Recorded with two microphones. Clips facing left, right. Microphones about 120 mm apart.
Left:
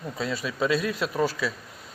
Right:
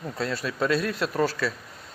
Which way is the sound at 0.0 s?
Centre (ahead or behind).